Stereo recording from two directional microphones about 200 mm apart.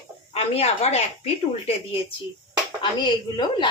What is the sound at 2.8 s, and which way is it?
Speech, 20° left (ahead or behind).